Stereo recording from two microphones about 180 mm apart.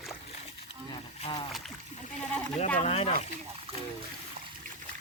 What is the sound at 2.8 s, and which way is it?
Speech, 35° left (ahead or behind).